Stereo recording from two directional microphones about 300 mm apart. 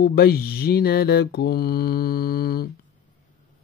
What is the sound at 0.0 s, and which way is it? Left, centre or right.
Mantra, left.